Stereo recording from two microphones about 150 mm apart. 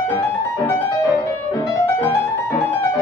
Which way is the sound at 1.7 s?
15° left (ahead or behind).